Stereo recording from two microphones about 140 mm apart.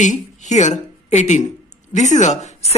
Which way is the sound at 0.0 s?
60° left (ahead or behind).